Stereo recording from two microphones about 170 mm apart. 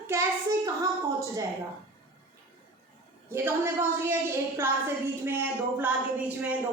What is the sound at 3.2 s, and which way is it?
A woman's voice, 15° right (ahead or behind).